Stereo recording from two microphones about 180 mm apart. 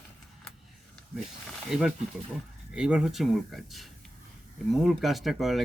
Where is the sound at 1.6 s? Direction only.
Centre (ahead or behind).